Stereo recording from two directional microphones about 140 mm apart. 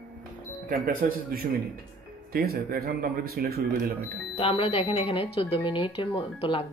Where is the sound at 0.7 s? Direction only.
90° right.